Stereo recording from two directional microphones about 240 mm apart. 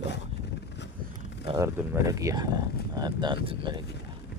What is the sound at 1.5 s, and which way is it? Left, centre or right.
Speech, centre.